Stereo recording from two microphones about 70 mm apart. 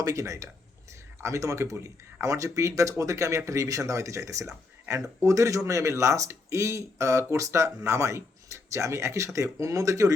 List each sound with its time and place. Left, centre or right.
0.0 s speech: right